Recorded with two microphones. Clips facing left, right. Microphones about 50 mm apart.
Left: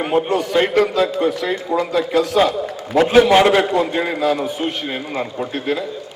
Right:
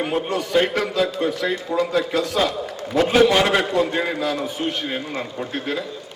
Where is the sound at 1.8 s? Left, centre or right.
Left.